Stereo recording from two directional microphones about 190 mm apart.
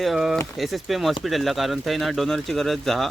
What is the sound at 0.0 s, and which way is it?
Speech, centre (ahead or behind).